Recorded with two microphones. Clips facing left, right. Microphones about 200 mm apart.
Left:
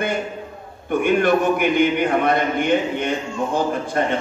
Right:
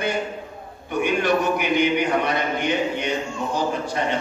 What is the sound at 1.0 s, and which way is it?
A man's voice, 50° left (ahead or behind).